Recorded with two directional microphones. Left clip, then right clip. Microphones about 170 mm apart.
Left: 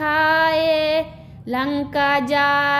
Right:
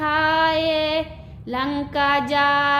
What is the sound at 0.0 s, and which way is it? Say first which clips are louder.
Child singing: left 2 dB; 35° left (ahead or behind).